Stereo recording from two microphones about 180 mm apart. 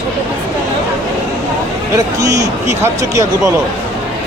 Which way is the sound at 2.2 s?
20° right (ahead or behind).